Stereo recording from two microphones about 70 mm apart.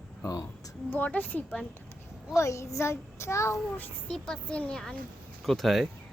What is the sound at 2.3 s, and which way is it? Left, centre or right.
A child's voice, left.